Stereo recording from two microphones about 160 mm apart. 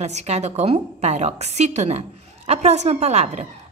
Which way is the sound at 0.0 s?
45° right (ahead or behind).